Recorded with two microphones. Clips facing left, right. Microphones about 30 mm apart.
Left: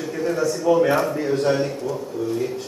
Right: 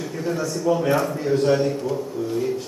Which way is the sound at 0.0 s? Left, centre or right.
Centre.